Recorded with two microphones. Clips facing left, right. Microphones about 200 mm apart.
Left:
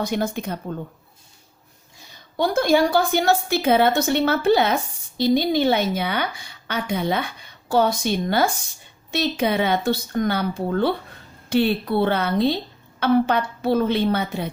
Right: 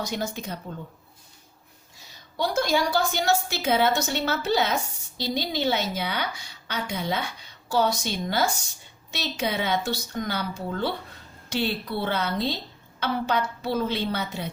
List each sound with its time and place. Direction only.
0.0 s a woman's voice: 55° left (ahead or behind)
2.4 s a woman's voice: 55° left (ahead or behind)